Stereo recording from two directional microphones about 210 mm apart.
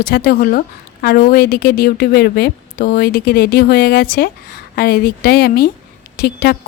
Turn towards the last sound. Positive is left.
turn(degrees=45)  # may be behind; listen again after turning